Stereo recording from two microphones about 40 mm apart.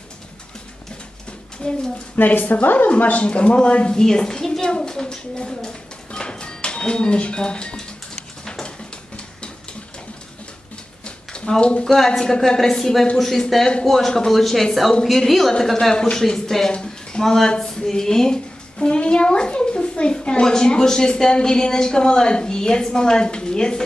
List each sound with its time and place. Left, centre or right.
2.1 s a woman's voice: left
2.9 s a woman's voice: left
3.9 s a woman's voice: centre
8.5 s a sound: left
11.1 s a sound: left
11.8 s speech: centre
14.3 s speech: centre
16.7 s a sound: centre
17.5 s a woman's voice: centre